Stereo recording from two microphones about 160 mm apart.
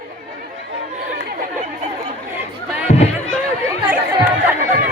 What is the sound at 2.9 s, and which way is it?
Music, 40° left (ahead or behind).